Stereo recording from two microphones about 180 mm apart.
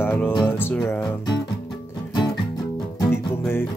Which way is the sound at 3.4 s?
10° left (ahead or behind).